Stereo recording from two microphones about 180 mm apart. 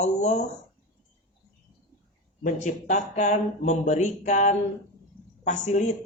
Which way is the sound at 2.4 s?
45° left (ahead or behind).